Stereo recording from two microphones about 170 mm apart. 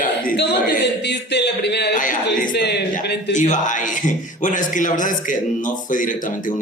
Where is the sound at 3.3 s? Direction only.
45° left (ahead or behind).